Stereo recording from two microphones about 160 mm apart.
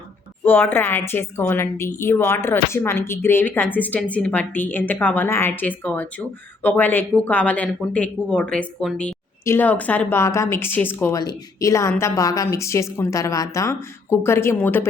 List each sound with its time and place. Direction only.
0.4 s a woman's voice: 15° left (ahead or behind)